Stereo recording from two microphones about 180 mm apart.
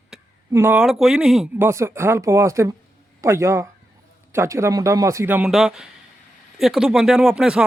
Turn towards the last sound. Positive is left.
turn(degrees=-5)  # may be behind; listen again after turning